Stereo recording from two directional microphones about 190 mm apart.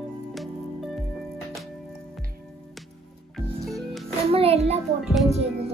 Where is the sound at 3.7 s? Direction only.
Centre (ahead or behind).